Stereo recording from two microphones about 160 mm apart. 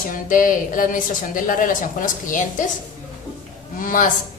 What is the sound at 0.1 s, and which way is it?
Speech, 55° left (ahead or behind).